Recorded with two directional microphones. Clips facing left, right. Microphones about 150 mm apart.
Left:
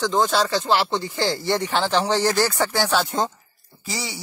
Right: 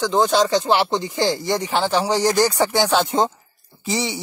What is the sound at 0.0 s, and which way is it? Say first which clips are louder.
Speech: right 3 dB; 10° right (ahead or behind).